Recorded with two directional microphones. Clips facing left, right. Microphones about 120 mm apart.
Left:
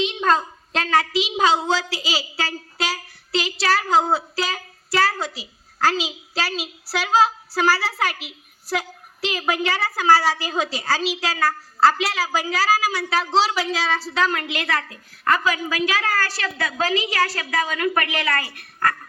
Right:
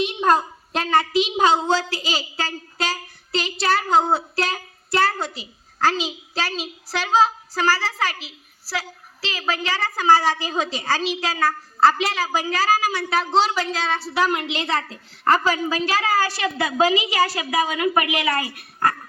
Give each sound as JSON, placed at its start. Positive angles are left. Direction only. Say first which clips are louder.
{"t": 0.0, "sound": "a sound", "louder": "right 1 dB", "side_deg": -10}
{"t": 1.5, "sound": "a woman's voice", "louder": "right 1 dB", "side_deg": 5}
{"t": 14.3, "sound": "a woman's voice", "louder": "right 1 dB", "side_deg": -25}
{"t": 16.4, "sound": "a woman's voice", "louder": "right 4 dB", "side_deg": -25}
{"t": 16.8, "sound": "a woman's voice", "louder": "right 3 dB", "side_deg": -5}
{"t": 17.7, "sound": "a woman's voice", "louder": "right 2 dB", "side_deg": -15}